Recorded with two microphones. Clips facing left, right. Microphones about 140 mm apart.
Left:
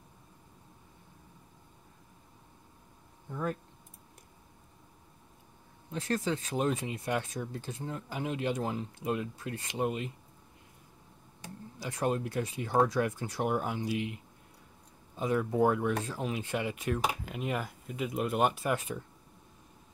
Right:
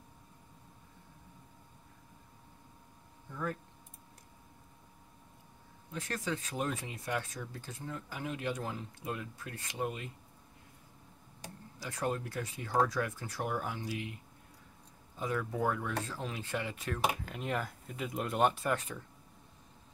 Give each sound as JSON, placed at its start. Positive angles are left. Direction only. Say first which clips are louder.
{"t": 3.3, "sound": "a sound", "louder": "left 4 dB", "side_deg": 25}
{"t": 5.9, "sound": "speech", "louder": "left 6 dB", "side_deg": 25}
{"t": 11.8, "sound": "speech", "louder": "left 4 dB", "side_deg": 20}
{"t": 15.1, "sound": "speech", "louder": "left 6 dB", "side_deg": 20}